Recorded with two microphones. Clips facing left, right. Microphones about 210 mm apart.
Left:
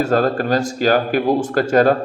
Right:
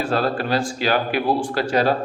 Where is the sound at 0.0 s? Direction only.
45° left (ahead or behind).